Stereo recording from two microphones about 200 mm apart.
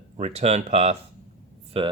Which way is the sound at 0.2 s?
30° right (ahead or behind).